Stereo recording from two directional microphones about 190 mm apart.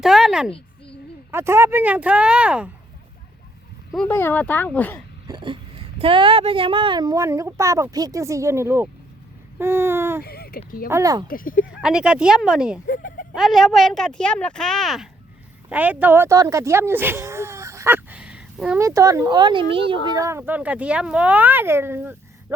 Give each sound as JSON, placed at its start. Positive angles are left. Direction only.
{"t": 0.0, "sound": "a woman's voice", "side_deg": 0}
{"t": 1.3, "sound": "speech", "side_deg": -15}
{"t": 3.9, "sound": "speech", "side_deg": 10}
{"t": 5.3, "sound": "speech", "side_deg": -25}
{"t": 10.2, "sound": "a sound", "side_deg": 55}
{"t": 10.8, "sound": "speech", "side_deg": -15}
{"t": 11.3, "sound": "speech", "side_deg": 45}
{"t": 11.7, "sound": "speech", "side_deg": -5}
{"t": 12.9, "sound": "speech", "side_deg": 45}
{"t": 13.3, "sound": "speech", "side_deg": 0}
{"t": 18.8, "sound": "speech", "side_deg": -15}
{"t": 20.1, "sound": "speech", "side_deg": -15}